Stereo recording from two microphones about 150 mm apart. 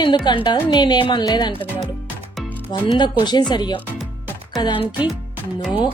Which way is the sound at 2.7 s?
30° left (ahead or behind).